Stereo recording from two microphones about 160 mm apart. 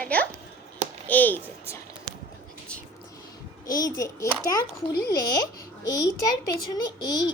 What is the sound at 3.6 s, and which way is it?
Speech, 20° left (ahead or behind).